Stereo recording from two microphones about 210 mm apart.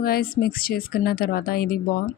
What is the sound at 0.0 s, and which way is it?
Speech, 45° left (ahead or behind).